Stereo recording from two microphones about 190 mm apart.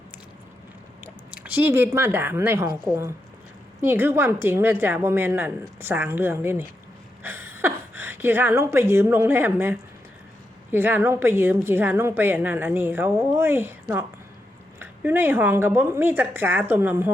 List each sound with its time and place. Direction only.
1.0 s speech: 10° right (ahead or behind)
3.8 s a woman's voice: 10° right (ahead or behind)